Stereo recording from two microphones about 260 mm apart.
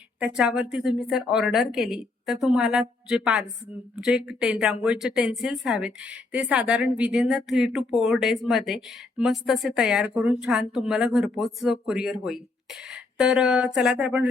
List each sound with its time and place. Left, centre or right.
0.2 s speech: centre